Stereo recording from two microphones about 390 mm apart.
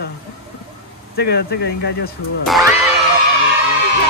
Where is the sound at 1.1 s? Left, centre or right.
Left.